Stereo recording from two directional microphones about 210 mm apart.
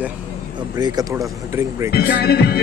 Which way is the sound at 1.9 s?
50° left (ahead or behind).